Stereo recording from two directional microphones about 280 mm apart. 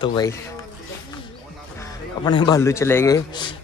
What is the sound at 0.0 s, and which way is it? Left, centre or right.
Speech, centre.